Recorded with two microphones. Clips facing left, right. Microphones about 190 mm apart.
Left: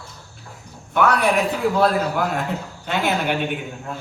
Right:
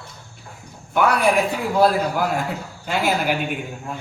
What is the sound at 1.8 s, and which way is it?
A man's voice, 10° right (ahead or behind).